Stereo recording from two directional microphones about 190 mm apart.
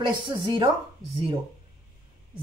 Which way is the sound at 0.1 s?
25° right (ahead or behind).